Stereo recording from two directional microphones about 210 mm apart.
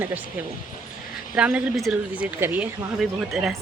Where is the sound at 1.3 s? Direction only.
5° right (ahead or behind).